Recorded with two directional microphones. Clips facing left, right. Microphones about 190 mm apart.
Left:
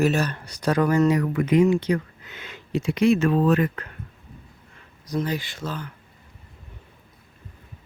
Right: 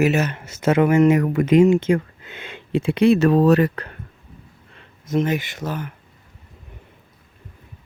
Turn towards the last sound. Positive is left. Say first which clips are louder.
# right 4 dB
turn(degrees=-20)  # may be behind; listen again after turning